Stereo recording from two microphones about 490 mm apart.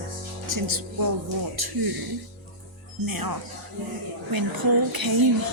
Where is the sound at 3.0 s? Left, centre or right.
Right.